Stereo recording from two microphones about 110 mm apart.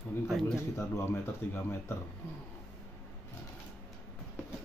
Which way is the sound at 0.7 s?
25° left (ahead or behind).